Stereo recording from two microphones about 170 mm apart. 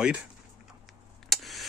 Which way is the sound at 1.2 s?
Centre (ahead or behind).